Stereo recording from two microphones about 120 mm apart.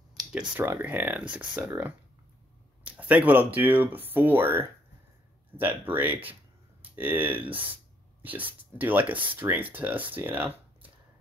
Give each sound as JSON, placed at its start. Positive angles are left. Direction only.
{"t": 0.5, "sound": "speech", "side_deg": -15}